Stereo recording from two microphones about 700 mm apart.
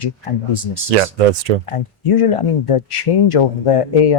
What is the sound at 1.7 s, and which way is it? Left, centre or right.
Speech, left.